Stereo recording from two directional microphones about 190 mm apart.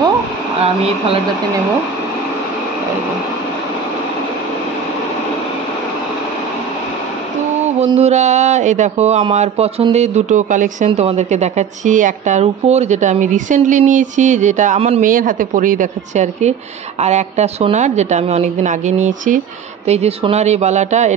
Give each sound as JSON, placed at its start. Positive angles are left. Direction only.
{"t": 0.6, "sound": "a woman's voice", "side_deg": -30}
{"t": 7.9, "sound": "a woman's voice", "side_deg": -35}